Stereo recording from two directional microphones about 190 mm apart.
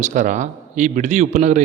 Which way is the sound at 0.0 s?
40° right (ahead or behind).